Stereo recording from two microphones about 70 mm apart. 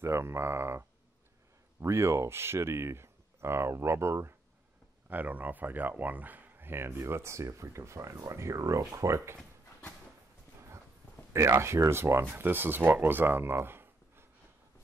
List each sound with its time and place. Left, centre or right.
0.0 s speech: right
5.1 s speech: right
11.3 s speech: right